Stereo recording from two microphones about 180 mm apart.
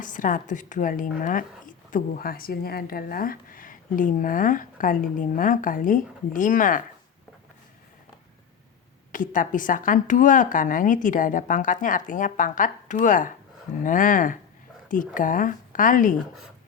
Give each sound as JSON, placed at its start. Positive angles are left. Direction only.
{"t": 0.0, "sound": "speech", "side_deg": 45}
{"t": 9.1, "sound": "speech", "side_deg": 45}